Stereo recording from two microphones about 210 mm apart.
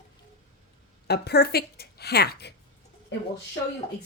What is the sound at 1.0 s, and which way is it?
Speech, 50° left (ahead or behind).